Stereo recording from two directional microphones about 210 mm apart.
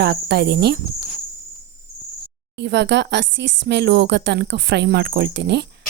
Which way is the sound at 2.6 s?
55° right (ahead or behind).